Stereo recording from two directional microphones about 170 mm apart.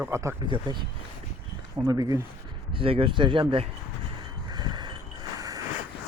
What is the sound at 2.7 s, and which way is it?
Speech, 35° right (ahead or behind).